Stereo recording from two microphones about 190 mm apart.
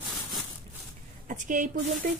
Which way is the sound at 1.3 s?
40° right (ahead or behind).